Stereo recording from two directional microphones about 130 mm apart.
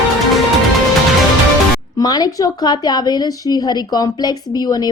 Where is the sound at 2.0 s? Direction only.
30° left (ahead or behind).